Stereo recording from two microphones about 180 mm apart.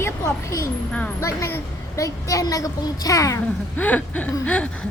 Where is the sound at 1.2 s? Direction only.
15° left (ahead or behind).